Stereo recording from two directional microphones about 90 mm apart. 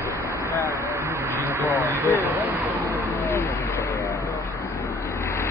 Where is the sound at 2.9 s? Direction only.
30° left (ahead or behind).